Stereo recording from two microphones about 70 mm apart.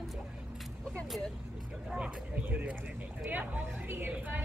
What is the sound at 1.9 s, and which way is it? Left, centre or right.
A woman's voice, centre.